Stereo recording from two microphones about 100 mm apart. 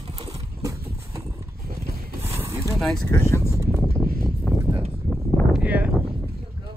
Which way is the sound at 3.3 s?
25° left (ahead or behind).